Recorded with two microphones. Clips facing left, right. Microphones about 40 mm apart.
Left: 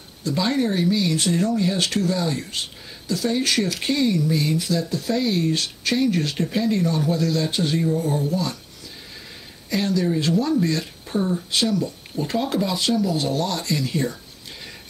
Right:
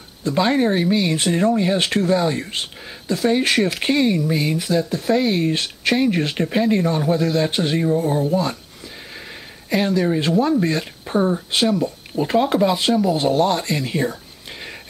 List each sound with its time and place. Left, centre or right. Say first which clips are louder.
0.2 s speech: right 4 dB; right